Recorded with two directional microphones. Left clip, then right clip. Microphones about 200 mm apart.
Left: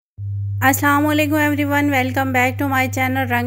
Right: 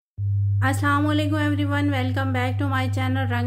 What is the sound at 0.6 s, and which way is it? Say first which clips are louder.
Speech: left 7 dB; 35° left (ahead or behind).